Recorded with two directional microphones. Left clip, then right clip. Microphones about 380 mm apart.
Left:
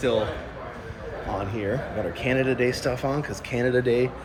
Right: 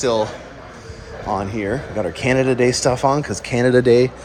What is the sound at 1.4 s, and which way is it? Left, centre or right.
Speech, centre.